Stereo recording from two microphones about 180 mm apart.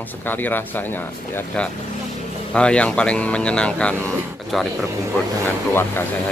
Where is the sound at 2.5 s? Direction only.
5° left (ahead or behind).